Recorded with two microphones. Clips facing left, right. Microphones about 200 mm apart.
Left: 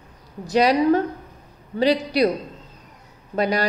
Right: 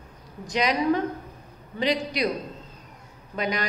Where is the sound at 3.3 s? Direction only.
35° left (ahead or behind).